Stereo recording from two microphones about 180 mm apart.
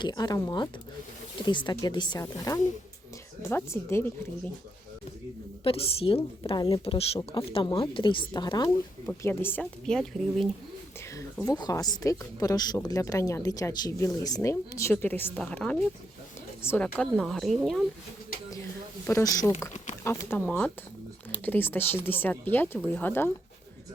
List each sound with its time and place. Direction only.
0.0 s speech: 25° left (ahead or behind)
5.6 s a woman's voice: 30° left (ahead or behind)
6.8 s a woman's voice: 35° left (ahead or behind)
9.0 s a woman's voice: 15° left (ahead or behind)
11.2 s a woman's voice: 20° left (ahead or behind); by 17.8 s centre (ahead or behind)
19.0 s speech: 15° left (ahead or behind)